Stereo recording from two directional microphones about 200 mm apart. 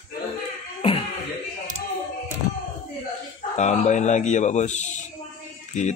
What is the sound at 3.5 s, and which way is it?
Speech, 35° left (ahead or behind).